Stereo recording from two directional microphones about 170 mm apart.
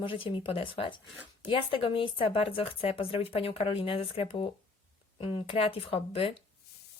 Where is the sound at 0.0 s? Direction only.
30° left (ahead or behind).